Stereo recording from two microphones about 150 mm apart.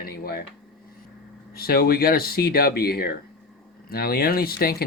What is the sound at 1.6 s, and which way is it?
Speech, 90° left.